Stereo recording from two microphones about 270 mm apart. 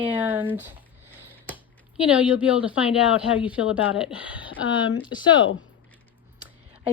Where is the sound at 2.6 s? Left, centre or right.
Centre.